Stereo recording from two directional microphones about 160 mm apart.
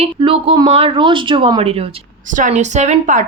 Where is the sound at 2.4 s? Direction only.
50° right (ahead or behind).